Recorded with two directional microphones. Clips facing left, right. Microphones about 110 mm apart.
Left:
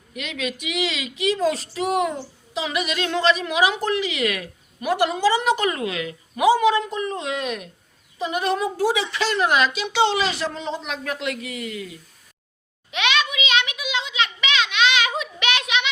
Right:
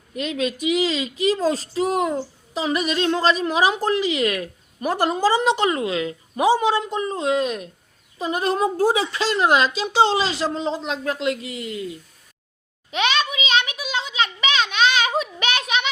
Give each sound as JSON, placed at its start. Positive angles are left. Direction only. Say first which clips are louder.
{"t": 0.2, "sound": "speech", "louder": "right 5 dB", "side_deg": -35}
{"t": 9.1, "sound": "a woman's voice", "louder": "right 2 dB", "side_deg": -30}
{"t": 12.9, "sound": "a sound", "louder": "right 1 dB", "side_deg": -35}